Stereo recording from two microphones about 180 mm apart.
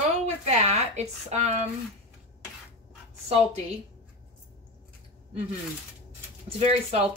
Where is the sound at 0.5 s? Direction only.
40° right (ahead or behind).